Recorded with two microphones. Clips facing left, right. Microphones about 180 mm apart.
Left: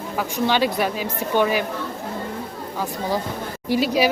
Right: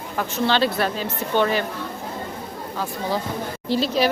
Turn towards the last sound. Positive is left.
turn(degrees=10)  # may be behind; listen again after turning